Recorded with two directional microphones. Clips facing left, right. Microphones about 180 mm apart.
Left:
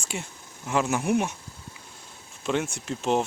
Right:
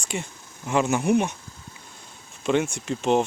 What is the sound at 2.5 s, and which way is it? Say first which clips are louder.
Speech: right 4 dB; centre (ahead or behind).